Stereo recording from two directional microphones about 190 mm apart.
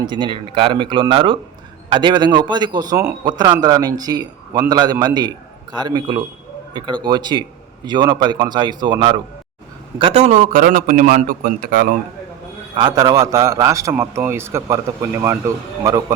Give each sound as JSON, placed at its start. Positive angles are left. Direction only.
{"t": 0.0, "sound": "a man's voice", "side_deg": -25}
{"t": 12.7, "sound": "a man's voice", "side_deg": -20}